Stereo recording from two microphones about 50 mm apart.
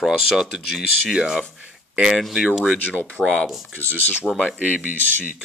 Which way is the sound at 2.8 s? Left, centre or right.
Left.